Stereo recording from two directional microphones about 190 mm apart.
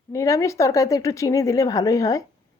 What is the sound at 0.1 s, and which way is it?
Speech, 15° left (ahead or behind).